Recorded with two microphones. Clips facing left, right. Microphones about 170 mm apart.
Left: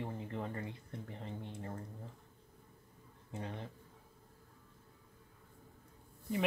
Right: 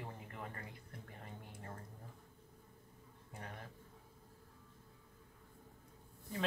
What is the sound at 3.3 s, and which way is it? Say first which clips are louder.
Speech: left 7 dB; 25° left (ahead or behind).